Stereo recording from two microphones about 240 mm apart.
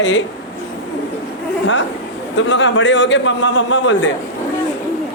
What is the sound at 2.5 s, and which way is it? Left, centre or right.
Speech, left.